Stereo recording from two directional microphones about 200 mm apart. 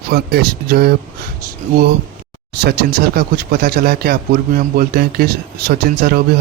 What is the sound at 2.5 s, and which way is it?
Speech, 55° right (ahead or behind).